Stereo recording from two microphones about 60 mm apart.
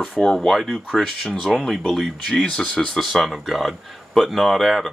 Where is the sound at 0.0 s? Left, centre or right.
Centre.